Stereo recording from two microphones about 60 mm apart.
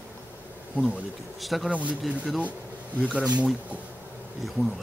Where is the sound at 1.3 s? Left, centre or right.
Centre.